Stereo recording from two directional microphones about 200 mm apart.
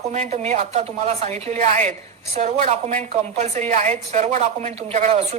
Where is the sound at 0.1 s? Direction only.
35° right (ahead or behind).